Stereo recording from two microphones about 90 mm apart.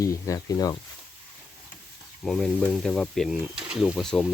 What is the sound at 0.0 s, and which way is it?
Speech, 40° left (ahead or behind).